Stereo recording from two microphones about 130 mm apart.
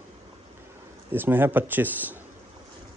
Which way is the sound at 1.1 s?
15° right (ahead or behind).